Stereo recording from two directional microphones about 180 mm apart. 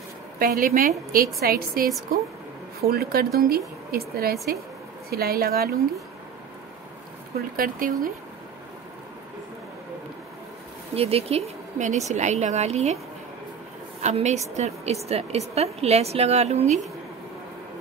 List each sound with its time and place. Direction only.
0.4 s speech: 55° right (ahead or behind)
7.3 s speech: 55° right (ahead or behind)
11.0 s a woman's voice: 35° right (ahead or behind)
14.0 s a woman's voice: 40° right (ahead or behind)